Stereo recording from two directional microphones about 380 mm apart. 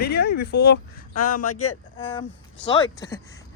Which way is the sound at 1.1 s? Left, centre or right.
Left.